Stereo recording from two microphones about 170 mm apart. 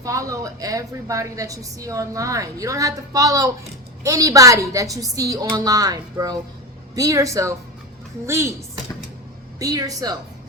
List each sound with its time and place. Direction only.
0.0 s a woman's voice: 20° right (ahead or behind)